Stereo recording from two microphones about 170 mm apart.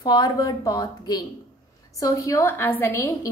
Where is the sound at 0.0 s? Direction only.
25° left (ahead or behind).